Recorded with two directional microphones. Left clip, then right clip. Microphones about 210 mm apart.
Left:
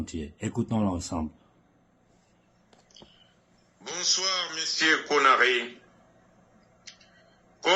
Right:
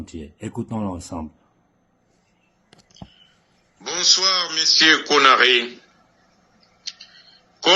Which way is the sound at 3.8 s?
45° right (ahead or behind).